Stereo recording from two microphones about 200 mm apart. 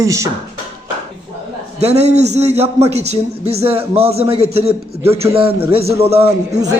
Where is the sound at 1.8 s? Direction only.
30° right (ahead or behind).